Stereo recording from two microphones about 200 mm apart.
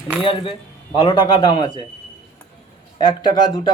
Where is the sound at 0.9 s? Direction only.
25° left (ahead or behind).